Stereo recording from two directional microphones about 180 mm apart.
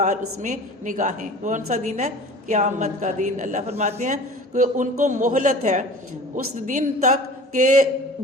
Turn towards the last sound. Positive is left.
turn(degrees=-45)  # may be behind; listen again after turning